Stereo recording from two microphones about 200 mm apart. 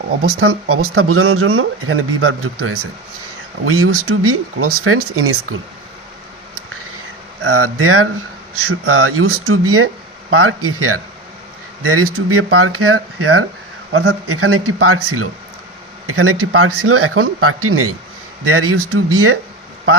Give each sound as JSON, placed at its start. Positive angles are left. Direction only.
{"t": 0.3, "sound": "speech", "side_deg": -90}
{"t": 7.4, "sound": "speech", "side_deg": -90}